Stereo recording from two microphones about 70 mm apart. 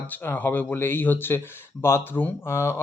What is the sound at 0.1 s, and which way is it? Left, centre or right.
Speech, left.